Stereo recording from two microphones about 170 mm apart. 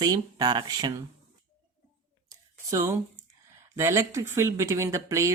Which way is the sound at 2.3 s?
15° right (ahead or behind).